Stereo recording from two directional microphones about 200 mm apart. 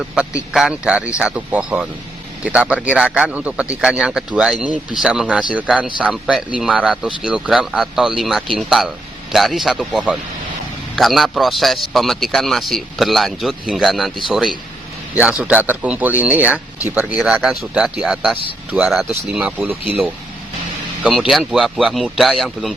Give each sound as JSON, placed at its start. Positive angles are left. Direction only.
{"t": 0.1, "sound": "a man's voice", "side_deg": -5}
{"t": 21.0, "sound": "a man's voice", "side_deg": 0}